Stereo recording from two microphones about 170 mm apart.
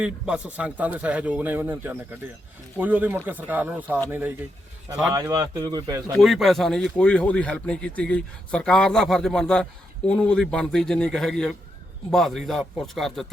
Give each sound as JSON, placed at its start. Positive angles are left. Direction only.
{"t": 0.0, "sound": "a man's voice", "side_deg": -5}
{"t": 5.1, "sound": "speech", "side_deg": -20}
{"t": 6.1, "sound": "speech", "side_deg": 0}